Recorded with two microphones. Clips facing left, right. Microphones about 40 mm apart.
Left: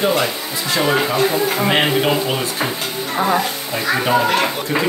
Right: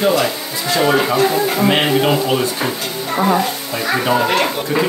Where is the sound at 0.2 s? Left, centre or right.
Centre.